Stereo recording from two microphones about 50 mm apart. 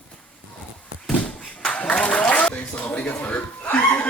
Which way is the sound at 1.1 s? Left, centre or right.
Left.